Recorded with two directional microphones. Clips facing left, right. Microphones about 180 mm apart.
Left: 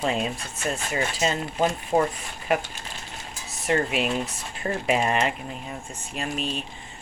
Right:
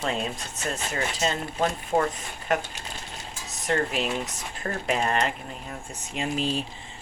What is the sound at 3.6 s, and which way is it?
Speech, 5° left (ahead or behind).